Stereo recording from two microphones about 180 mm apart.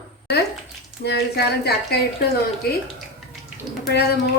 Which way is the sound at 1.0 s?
65° left (ahead or behind).